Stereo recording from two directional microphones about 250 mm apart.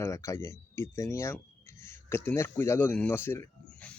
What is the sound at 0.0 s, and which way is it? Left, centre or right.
Speech, centre.